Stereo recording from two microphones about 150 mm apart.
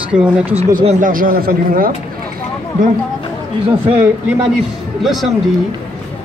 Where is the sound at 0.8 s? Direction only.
60° right (ahead or behind).